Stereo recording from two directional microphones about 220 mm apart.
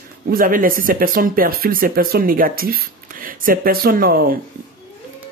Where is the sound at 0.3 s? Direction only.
40° right (ahead or behind).